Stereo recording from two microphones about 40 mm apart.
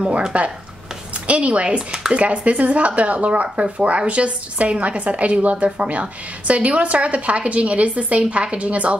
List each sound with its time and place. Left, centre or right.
0.0 s a woman's voice: right